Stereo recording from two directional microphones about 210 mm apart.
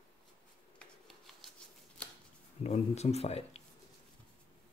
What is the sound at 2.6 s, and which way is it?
Speech, 30° left (ahead or behind).